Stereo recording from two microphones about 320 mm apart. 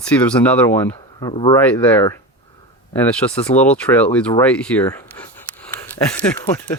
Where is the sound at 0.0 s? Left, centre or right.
Centre.